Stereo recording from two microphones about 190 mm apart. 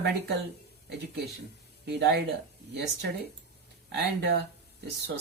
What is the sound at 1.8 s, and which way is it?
Speech, 60° right (ahead or behind).